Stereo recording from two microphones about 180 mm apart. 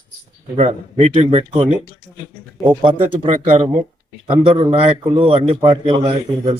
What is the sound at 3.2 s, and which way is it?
A man's voice, 35° right (ahead or behind).